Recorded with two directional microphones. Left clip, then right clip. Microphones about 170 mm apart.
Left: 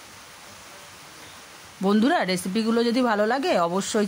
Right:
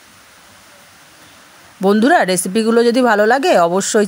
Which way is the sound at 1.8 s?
35° right (ahead or behind).